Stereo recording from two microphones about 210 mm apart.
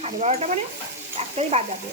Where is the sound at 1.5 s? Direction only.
30° right (ahead or behind).